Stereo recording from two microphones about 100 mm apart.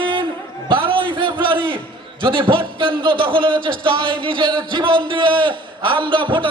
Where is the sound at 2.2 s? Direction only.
55° right (ahead or behind).